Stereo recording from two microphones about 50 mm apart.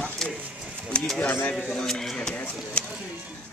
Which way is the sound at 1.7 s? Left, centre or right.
Centre.